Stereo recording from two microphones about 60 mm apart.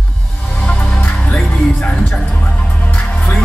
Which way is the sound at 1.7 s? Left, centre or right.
Centre.